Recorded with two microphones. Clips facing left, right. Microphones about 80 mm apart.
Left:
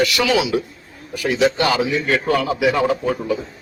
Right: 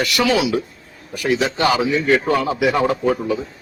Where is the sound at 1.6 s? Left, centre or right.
Centre.